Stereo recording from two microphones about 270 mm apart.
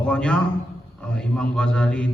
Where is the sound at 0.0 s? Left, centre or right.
Centre.